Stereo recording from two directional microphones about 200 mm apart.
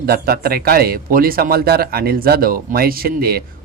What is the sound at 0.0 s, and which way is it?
A man's voice, 50° right (ahead or behind).